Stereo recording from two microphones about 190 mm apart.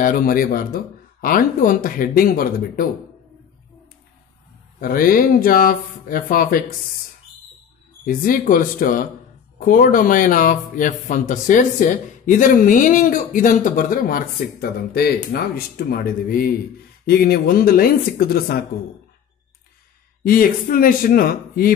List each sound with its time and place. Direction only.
0.0 s speech: 50° left (ahead or behind)
4.7 s speech: 50° left (ahead or behind)
8.0 s speech: 45° left (ahead or behind)
20.2 s speech: 50° left (ahead or behind)